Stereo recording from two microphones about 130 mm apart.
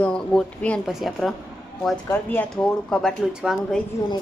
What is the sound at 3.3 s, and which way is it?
Speech, 5° right (ahead or behind).